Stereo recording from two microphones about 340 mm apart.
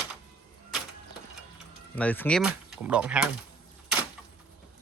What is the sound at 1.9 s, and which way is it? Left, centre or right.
Speech, centre.